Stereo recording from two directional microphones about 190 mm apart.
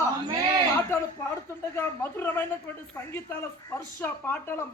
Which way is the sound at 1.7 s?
10° left (ahead or behind).